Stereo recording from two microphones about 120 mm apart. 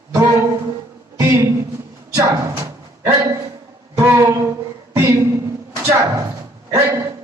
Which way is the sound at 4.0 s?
20° right (ahead or behind).